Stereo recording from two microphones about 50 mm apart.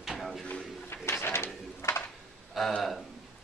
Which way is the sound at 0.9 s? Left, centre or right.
Left.